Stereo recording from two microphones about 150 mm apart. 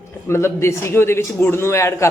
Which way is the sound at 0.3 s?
20° left (ahead or behind).